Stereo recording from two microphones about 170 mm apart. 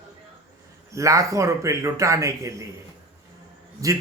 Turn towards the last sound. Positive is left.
turn(degrees=-20)  # may be behind; listen again after turning